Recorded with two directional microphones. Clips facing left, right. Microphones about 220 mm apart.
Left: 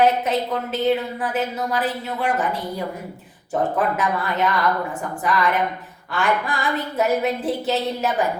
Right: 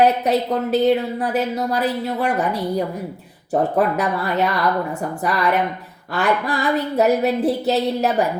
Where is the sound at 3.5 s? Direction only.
40° right (ahead or behind).